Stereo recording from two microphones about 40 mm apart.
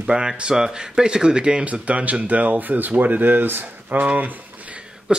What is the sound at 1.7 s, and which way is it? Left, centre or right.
Speech, right.